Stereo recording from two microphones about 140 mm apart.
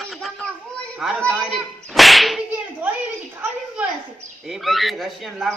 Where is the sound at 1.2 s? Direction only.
Centre (ahead or behind).